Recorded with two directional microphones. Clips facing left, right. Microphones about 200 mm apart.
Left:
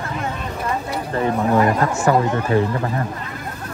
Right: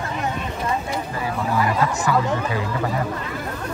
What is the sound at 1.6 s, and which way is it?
Speech, 50° left (ahead or behind).